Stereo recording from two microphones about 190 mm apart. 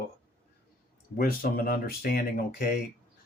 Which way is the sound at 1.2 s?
50° left (ahead or behind).